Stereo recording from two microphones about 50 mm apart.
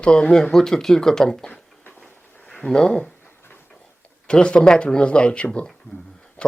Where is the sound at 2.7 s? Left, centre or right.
Centre.